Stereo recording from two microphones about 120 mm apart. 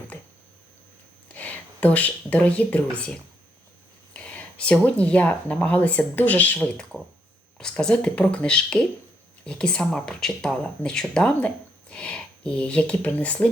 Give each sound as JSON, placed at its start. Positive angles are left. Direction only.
{"t": 1.3, "sound": "speech", "side_deg": 10}